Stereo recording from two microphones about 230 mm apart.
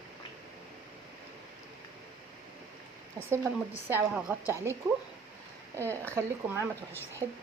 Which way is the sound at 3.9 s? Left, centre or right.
Centre.